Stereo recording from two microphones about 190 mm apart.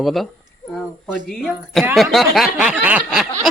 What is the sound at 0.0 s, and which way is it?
Speech, centre (ahead or behind).